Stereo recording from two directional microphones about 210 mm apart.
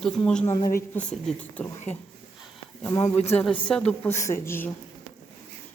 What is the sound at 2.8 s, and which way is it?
A woman's voice, 15° left (ahead or behind).